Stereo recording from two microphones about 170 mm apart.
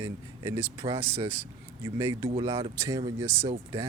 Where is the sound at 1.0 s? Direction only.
15° right (ahead or behind).